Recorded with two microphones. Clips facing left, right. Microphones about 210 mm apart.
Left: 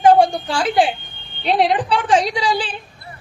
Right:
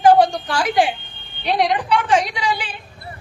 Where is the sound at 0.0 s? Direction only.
30° left (ahead or behind).